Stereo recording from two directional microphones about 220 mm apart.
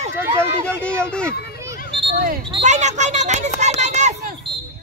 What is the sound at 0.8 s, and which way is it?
Speech, 5° left (ahead or behind).